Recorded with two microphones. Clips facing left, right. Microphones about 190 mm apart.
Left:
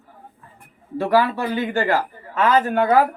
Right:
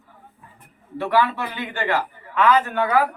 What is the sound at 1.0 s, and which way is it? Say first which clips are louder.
A man's voice: left 3 dB; 40° left (ahead or behind).